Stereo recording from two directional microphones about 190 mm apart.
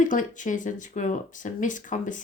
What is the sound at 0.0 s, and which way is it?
Speech, 45° left (ahead or behind).